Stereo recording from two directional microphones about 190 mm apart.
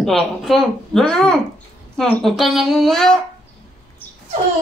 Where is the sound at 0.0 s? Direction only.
Centre (ahead or behind).